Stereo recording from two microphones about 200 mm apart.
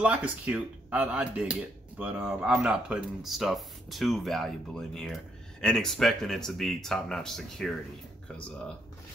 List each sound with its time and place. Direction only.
0.0 s speech: 5° right (ahead or behind)